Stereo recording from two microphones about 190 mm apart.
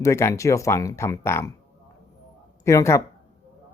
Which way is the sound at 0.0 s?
15° left (ahead or behind).